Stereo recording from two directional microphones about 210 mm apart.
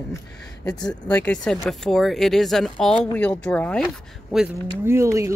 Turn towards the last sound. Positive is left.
turn(degrees=-15)  # may be behind; listen again after turning